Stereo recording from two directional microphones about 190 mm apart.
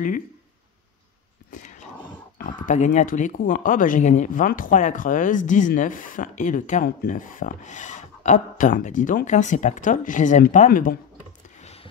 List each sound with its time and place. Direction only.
1.5 s dog: 40° left (ahead or behind)
2.3 s speech: 45° left (ahead or behind)
11.6 s a sound: 35° left (ahead or behind)